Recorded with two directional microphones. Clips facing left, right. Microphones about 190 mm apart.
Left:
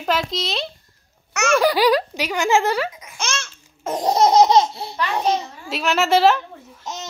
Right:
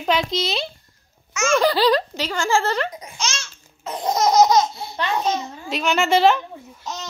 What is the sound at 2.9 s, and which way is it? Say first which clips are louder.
Laughter: right 6 dB; 35° right (ahead or behind).